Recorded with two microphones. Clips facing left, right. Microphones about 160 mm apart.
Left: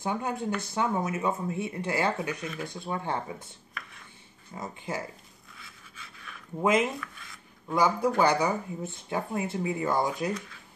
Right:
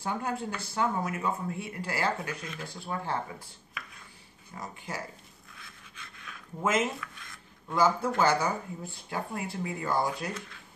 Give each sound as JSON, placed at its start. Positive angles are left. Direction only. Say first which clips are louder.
{"t": 0.0, "sound": "speech", "louder": "left 2 dB", "side_deg": 20}
{"t": 2.4, "sound": "speech", "louder": "left 5 dB", "side_deg": 5}
{"t": 2.7, "sound": "speech", "louder": "even", "side_deg": 20}
{"t": 4.6, "sound": "speech", "louder": "left 4 dB", "side_deg": 20}
{"t": 5.6, "sound": "pant", "louder": "even", "side_deg": 5}
{"t": 6.6, "sound": "a man's voice", "louder": "left 3 dB", "side_deg": 15}
{"t": 7.0, "sound": "a sound", "louder": "left 2 dB", "side_deg": 0}
{"t": 7.7, "sound": "a man's voice", "louder": "left 2 dB", "side_deg": 15}